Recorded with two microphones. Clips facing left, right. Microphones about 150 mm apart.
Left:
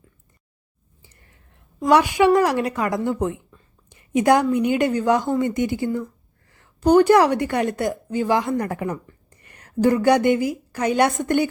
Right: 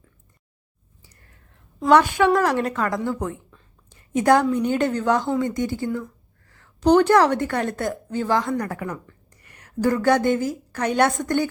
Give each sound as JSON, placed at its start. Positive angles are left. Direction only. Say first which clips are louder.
{"t": 1.8, "sound": "a woman's voice", "louder": "even", "side_deg": 10}
{"t": 9.9, "sound": "a woman's voice", "louder": "left 1 dB", "side_deg": 15}